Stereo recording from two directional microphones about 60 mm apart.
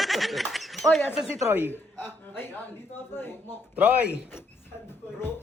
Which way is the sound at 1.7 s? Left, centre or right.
Left.